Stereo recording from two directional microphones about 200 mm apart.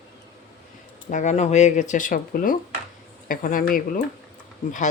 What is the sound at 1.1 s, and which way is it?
Speech, 35° left (ahead or behind).